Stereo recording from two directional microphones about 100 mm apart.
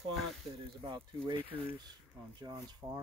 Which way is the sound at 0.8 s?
55° right (ahead or behind).